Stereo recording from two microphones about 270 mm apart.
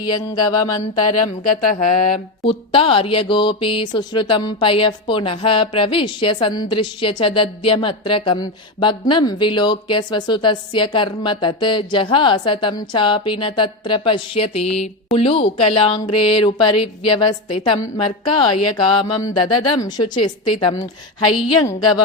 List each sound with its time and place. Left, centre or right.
0.1 s speech: centre
1.0 s speech: left
2.4 s speech: centre